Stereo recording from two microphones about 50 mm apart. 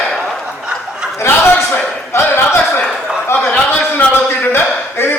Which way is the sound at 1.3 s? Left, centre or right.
Left.